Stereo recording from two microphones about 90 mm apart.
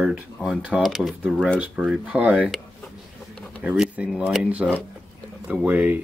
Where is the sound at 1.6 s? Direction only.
10° right (ahead or behind).